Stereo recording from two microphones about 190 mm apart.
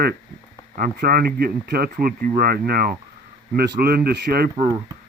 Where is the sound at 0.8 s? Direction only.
50° right (ahead or behind).